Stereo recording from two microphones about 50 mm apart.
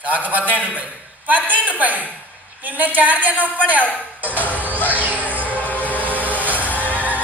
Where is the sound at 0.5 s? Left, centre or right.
Left.